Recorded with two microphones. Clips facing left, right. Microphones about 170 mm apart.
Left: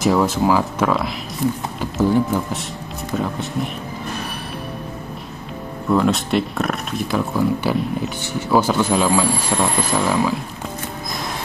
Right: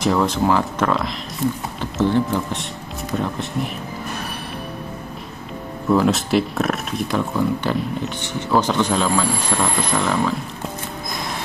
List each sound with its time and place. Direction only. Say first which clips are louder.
0.0 s speech: left 2 dB; 5° left (ahead or behind)
5.9 s speech: even; centre (ahead or behind)